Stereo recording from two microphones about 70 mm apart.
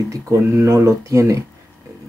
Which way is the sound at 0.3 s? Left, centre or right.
Right.